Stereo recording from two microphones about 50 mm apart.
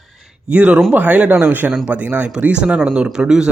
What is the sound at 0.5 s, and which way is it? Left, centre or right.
Speech, right.